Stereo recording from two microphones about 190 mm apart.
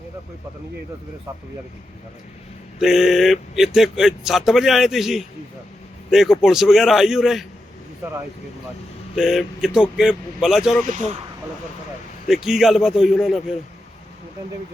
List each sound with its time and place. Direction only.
2.8 s speech: centre (ahead or behind)
9.1 s speech: centre (ahead or behind)
10.8 s speech: 35° right (ahead or behind)
12.3 s speech: centre (ahead or behind)